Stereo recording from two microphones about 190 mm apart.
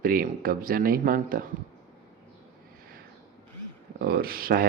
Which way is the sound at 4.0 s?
50° right (ahead or behind).